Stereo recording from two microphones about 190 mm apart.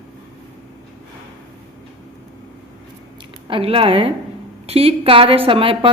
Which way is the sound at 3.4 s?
30° right (ahead or behind).